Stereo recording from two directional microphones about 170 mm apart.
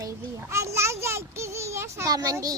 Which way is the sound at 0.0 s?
15° right (ahead or behind).